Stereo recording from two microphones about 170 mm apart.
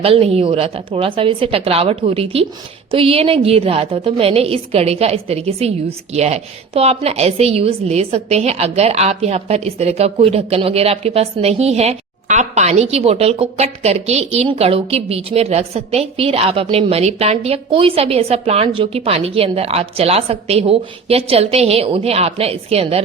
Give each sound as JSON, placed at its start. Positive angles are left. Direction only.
{"t": 0.0, "sound": "a woman's voice", "side_deg": -35}